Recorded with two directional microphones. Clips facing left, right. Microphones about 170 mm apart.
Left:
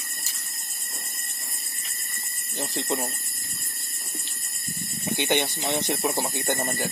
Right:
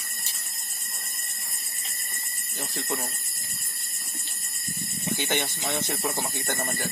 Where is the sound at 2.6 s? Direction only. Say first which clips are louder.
Left 4 dB; 20° left (ahead or behind).